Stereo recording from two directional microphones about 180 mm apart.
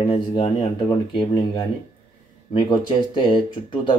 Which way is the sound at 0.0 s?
25° left (ahead or behind).